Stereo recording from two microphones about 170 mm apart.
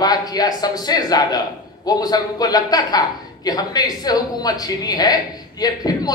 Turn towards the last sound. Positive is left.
turn(degrees=25)  # may be behind; listen again after turning